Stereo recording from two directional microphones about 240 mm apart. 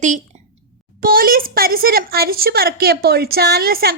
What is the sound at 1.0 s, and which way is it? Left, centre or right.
A woman's voice, right.